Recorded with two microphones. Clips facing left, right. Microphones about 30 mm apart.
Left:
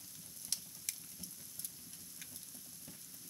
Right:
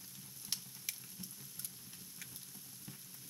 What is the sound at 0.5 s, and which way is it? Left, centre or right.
Sizzle, centre.